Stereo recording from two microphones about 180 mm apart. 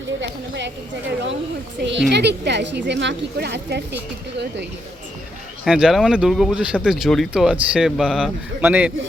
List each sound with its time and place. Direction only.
0.2 s speech: 80° right
1.8 s a woman's voice: 75° right (ahead or behind)
5.6 s speech: 5° right (ahead or behind)